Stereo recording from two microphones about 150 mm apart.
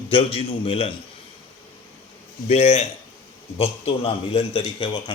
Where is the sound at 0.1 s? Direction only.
40° left (ahead or behind).